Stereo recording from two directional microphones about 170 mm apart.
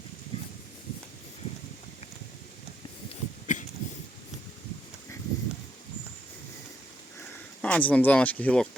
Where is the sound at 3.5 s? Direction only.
50° left (ahead or behind).